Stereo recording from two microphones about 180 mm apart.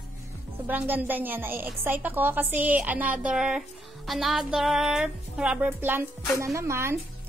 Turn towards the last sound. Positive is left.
turn(degrees=-15)  # may be behind; listen again after turning